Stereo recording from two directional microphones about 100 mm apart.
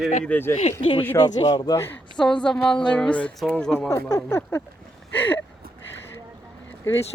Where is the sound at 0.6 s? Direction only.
90° left.